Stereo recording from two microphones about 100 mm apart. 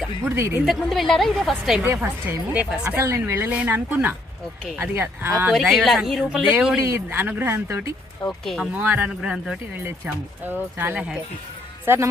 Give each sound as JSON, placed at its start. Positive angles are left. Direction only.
{"t": 0.3, "sound": "speech", "side_deg": -25}
{"t": 0.6, "sound": "a woman's voice", "side_deg": 0}
{"t": 1.8, "sound": "a woman's voice", "side_deg": -20}
{"t": 3.0, "sound": "speech", "side_deg": -30}
{"t": 3.5, "sound": "a woman's voice", "side_deg": -15}
{"t": 5.6, "sound": "a woman's voice", "side_deg": 0}
{"t": 6.7, "sound": "speech", "side_deg": -25}
{"t": 8.3, "sound": "a woman's voice", "side_deg": 0}
{"t": 8.7, "sound": "speech", "side_deg": -20}
{"t": 9.0, "sound": "a woman's voice", "side_deg": -5}
{"t": 10.4, "sound": "speech", "side_deg": -20}